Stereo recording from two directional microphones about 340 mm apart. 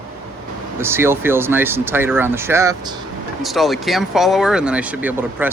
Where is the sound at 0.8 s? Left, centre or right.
Centre.